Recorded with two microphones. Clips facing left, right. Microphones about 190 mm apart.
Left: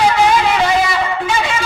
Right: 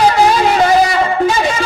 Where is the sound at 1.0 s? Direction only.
40° right (ahead or behind).